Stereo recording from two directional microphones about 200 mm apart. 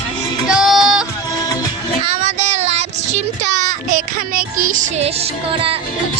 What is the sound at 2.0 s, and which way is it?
Child singing, 30° right (ahead or behind).